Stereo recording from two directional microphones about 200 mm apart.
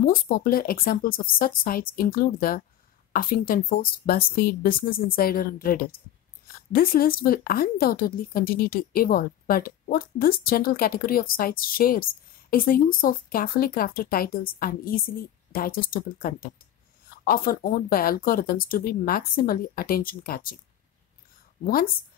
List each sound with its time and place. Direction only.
0.0 s a woman's voice: 45° left (ahead or behind)
21.6 s a woman's voice: 45° left (ahead or behind)